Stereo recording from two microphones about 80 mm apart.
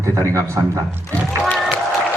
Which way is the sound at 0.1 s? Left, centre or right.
Right.